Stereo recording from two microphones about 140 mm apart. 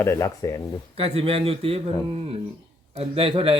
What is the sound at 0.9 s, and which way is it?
Speech, 45° right (ahead or behind).